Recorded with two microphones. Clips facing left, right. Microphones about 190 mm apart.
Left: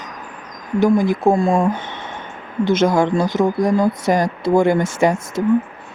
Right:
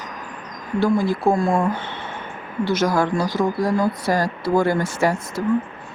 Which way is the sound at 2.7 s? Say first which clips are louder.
Left 4 dB; 25° left (ahead or behind).